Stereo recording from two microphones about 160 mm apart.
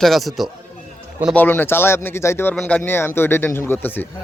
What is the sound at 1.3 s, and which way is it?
A man's voice, 10° left (ahead or behind).